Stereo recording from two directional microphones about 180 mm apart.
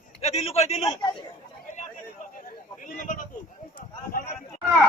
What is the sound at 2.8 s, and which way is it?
Speech, 45° left (ahead or behind).